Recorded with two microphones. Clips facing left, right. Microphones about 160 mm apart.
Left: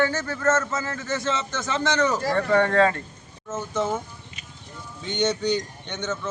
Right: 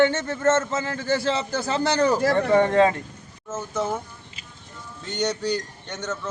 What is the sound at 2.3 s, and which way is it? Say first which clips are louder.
Speech: left 1 dB; 20° right (ahead or behind).